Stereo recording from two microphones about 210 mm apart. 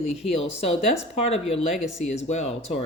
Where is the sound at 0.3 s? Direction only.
30° left (ahead or behind).